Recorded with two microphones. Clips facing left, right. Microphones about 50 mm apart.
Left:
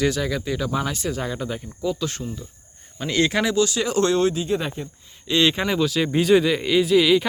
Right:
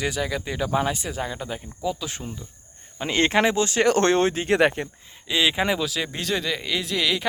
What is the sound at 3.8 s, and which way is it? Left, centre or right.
Speech, right.